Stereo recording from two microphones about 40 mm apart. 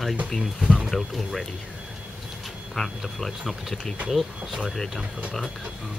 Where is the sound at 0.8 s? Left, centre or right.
Centre.